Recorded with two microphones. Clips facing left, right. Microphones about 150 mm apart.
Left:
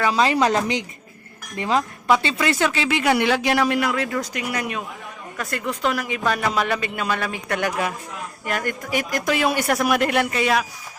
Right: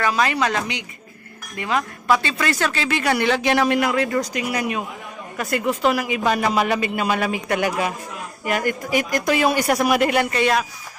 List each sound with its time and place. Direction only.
0.1 s a woman's voice: 30° left (ahead or behind); by 10.7 s centre (ahead or behind)